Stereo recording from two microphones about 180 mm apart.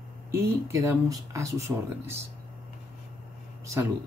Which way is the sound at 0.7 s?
15° right (ahead or behind).